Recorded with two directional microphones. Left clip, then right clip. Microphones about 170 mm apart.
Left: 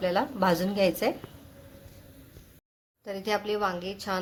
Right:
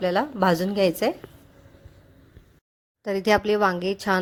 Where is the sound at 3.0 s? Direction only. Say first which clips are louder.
Right 9 dB; 45° right (ahead or behind).